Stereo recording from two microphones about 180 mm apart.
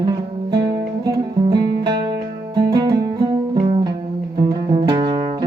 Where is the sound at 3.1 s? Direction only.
25° right (ahead or behind).